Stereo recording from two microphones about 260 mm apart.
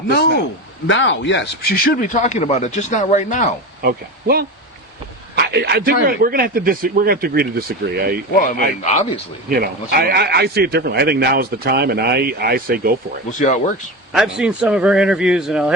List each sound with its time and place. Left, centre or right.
0.1 s a man's voice: left
3.8 s speech: right
8.4 s a man's voice: left
9.5 s speech: right
13.4 s speech: left
14.1 s a man's voice: centre